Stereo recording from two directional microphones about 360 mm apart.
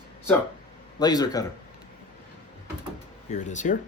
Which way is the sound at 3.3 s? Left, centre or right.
Centre.